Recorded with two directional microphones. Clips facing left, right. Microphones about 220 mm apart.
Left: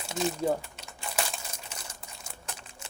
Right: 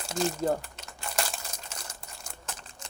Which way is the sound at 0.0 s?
Centre (ahead or behind).